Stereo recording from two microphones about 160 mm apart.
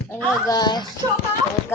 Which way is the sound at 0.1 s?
20° left (ahead or behind).